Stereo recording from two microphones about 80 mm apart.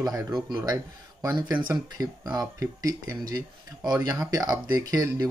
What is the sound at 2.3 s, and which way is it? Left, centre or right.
Speech, right.